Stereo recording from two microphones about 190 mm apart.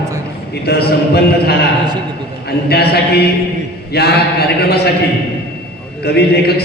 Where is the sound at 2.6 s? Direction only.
55° left (ahead or behind).